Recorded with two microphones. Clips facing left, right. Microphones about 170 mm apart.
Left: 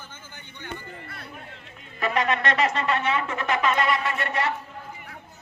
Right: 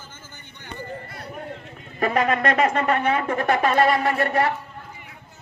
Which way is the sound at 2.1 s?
50° right (ahead or behind).